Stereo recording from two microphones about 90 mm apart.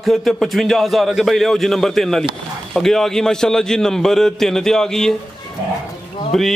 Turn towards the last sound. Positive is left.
turn(degrees=5)  # may be behind; listen again after turning